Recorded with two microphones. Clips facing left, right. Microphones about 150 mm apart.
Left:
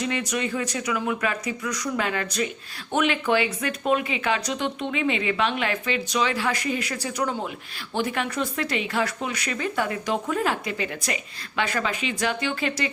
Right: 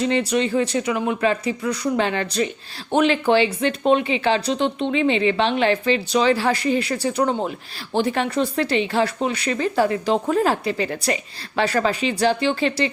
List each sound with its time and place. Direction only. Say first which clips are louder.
0.0 s speech: right 7 dB; 30° right (ahead or behind)